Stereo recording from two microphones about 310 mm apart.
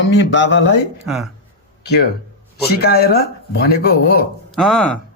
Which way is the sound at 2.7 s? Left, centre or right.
Left.